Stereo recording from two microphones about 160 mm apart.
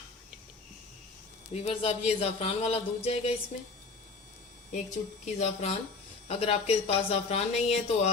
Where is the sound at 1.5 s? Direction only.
40° left (ahead or behind).